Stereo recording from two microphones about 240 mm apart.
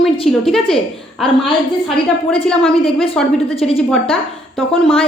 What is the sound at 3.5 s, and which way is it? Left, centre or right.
Speech, left.